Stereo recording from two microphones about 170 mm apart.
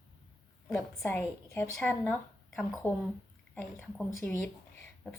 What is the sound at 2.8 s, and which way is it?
Speech, 15° left (ahead or behind).